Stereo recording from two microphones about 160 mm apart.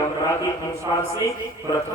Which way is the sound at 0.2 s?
20° left (ahead or behind).